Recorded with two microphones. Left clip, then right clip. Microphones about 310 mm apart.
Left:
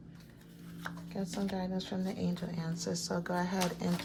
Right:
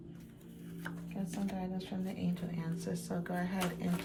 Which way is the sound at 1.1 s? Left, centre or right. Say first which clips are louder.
Left 4 dB; left.